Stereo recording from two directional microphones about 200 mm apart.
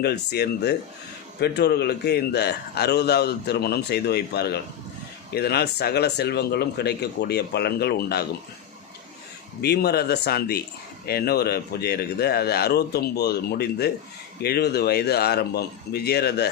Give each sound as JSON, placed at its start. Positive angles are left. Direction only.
{"t": 0.0, "sound": "a man's voice", "side_deg": 55}
{"t": 9.6, "sound": "a man's voice", "side_deg": 55}